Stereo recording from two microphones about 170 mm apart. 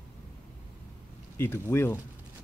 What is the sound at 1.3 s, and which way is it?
Speech, 15° left (ahead or behind).